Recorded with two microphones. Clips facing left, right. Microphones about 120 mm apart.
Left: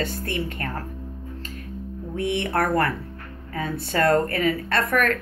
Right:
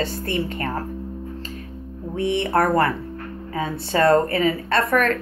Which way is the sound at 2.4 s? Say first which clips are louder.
Right 4 dB; 30° right (ahead or behind).